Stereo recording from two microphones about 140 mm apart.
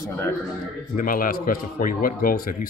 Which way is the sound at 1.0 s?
85° left.